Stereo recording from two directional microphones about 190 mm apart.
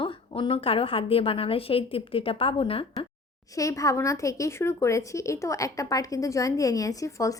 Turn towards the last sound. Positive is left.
turn(degrees=15)  # may be behind; listen again after turning